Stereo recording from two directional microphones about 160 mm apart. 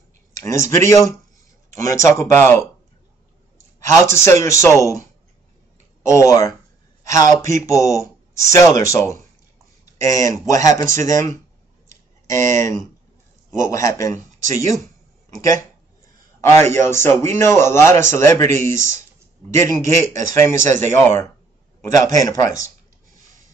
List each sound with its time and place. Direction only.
0.4 s speech: 15° left (ahead or behind)
4.1 s speech: 15° left (ahead or behind)
6.0 s a man's voice: 20° left (ahead or behind)
12.3 s a man's voice: 20° left (ahead or behind)